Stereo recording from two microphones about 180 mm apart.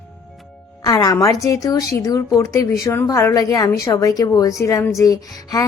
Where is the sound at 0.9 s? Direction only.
20° left (ahead or behind).